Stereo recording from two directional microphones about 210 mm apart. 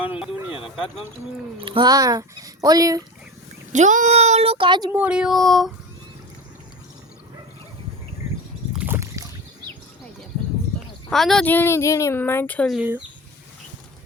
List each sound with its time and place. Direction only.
0.0 s a sound: 5° right (ahead or behind)
1.5 s speech: 25° right (ahead or behind)
3.7 s speech: 35° right (ahead or behind)
4.9 s speech: 5° right (ahead or behind)
8.7 s boat: 10° right (ahead or behind)
11.1 s a woman's voice: centre (ahead or behind)